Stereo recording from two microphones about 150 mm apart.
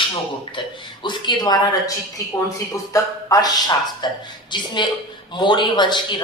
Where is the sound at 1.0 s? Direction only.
30° left (ahead or behind).